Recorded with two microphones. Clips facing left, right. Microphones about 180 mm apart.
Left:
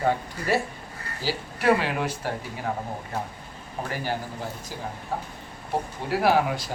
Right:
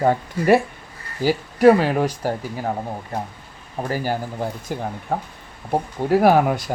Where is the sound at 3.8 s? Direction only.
40° right (ahead or behind).